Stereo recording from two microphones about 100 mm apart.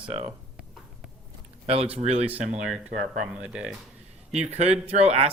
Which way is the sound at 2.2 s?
15° right (ahead or behind).